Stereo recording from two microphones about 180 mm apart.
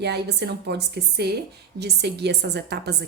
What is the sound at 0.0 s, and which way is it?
A woman's voice, 65° right (ahead or behind).